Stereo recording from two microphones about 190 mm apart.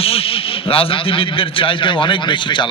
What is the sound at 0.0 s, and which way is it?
A man's voice, 30° left (ahead or behind).